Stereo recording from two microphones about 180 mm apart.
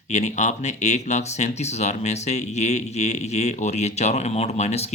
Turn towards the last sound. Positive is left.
turn(degrees=35)  # may be behind; listen again after turning